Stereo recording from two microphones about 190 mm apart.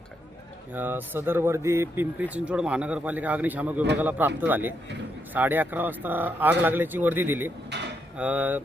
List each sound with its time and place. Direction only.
0.7 s speech: 10° right (ahead or behind)
7.7 s mechanisms: 65° right (ahead or behind)
8.1 s speech: 5° right (ahead or behind)